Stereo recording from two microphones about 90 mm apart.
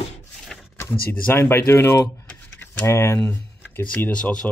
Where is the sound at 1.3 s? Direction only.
25° left (ahead or behind).